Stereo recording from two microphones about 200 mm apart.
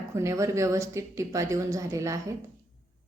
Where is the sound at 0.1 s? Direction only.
15° right (ahead or behind).